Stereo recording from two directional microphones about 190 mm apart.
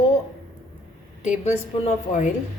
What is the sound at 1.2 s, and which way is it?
A woman's voice, 35° left (ahead or behind).